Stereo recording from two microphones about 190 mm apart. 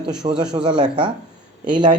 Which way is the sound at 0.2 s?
25° right (ahead or behind).